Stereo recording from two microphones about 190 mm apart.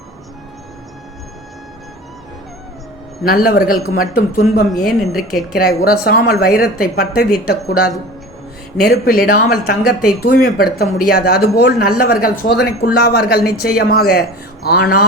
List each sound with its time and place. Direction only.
3.2 s a woman's voice: 55° left (ahead or behind)
4.7 s a woman's voice: centre (ahead or behind)
5.5 s a woman's voice: 55° left (ahead or behind)